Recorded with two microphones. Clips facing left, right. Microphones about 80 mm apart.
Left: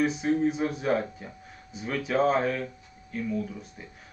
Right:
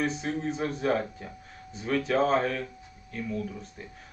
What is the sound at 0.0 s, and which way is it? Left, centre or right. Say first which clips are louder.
Speech: left 5 dB; centre.